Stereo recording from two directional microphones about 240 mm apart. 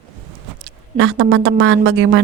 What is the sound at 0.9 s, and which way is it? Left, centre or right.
A woman's voice, right.